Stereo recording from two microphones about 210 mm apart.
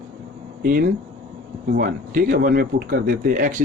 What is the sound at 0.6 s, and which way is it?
Speech, 45° right (ahead or behind).